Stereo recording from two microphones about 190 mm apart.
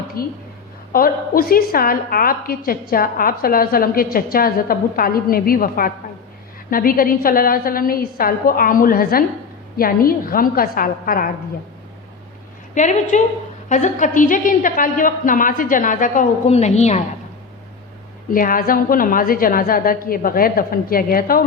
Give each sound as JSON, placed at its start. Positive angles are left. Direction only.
{"t": 0.2, "sound": "a woman's voice", "side_deg": 50}
{"t": 12.7, "sound": "a woman's voice", "side_deg": 40}
{"t": 18.3, "sound": "a woman's voice", "side_deg": 45}